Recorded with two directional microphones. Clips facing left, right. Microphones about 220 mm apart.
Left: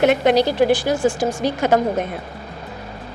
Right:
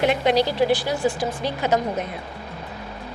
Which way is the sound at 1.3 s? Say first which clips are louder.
Left 5 dB; 85° left.